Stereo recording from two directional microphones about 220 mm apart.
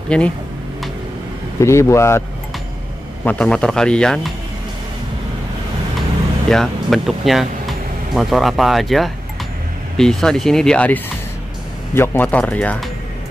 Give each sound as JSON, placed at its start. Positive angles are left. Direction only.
{"t": 0.1, "sound": "speech", "side_deg": 5}
{"t": 1.6, "sound": "speech", "side_deg": 15}
{"t": 3.3, "sound": "speech", "side_deg": 5}
{"t": 6.5, "sound": "speech", "side_deg": 0}